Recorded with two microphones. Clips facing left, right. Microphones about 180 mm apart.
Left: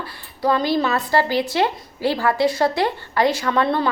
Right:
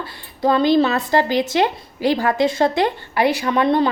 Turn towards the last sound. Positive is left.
turn(degrees=-20)  # may be behind; listen again after turning